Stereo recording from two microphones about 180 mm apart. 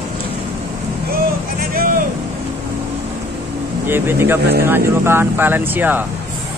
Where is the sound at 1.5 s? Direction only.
55° right (ahead or behind).